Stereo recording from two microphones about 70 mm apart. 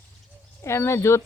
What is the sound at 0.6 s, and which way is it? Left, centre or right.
Speech, left.